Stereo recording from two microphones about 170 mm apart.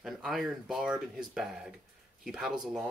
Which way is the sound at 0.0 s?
Centre (ahead or behind).